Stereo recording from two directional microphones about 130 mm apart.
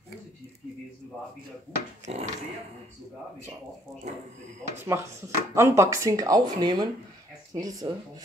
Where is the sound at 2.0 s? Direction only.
55° right (ahead or behind).